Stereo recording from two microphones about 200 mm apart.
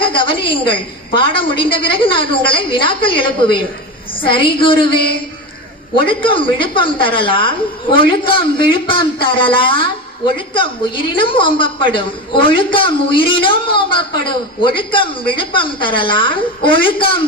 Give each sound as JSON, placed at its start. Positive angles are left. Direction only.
{"t": 0.0, "sound": "a woman's voice", "side_deg": 25}
{"t": 6.1, "sound": "a woman's voice", "side_deg": 25}